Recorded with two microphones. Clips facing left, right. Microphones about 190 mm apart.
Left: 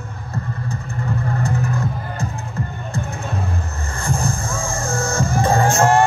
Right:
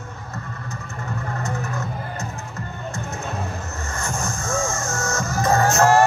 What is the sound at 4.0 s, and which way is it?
Music, 30° left (ahead or behind).